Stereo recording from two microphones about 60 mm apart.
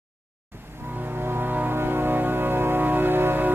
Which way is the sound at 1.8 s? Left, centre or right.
Right.